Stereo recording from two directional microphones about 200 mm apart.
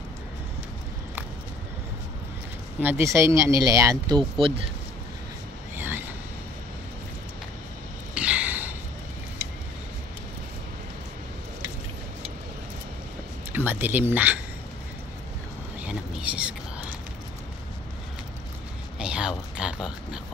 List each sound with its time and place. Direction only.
2.8 s speech: 10° right (ahead or behind)
5.8 s vehicle: 10° right (ahead or behind)
8.1 s a sound: 5° right (ahead or behind)
13.5 s speech: 10° right (ahead or behind)
15.8 s whispering: 5° right (ahead or behind)
18.9 s a sound: 5° right (ahead or behind)